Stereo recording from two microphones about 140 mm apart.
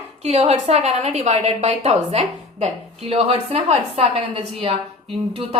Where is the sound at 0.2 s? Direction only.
50° right (ahead or behind).